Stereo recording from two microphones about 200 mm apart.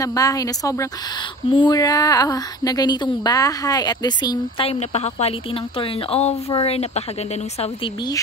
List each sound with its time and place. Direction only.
0.0 s speech: 15° left (ahead or behind)